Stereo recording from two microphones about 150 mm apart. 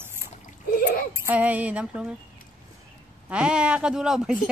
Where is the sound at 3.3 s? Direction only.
5° right (ahead or behind).